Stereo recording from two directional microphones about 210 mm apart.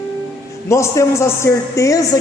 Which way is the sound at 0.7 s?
15° left (ahead or behind).